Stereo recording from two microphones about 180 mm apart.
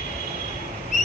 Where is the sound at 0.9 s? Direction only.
40° left (ahead or behind).